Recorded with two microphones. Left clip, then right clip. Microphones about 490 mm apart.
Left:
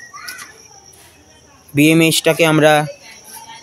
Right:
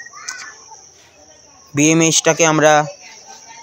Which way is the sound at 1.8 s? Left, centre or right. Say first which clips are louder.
Left 1 dB; left.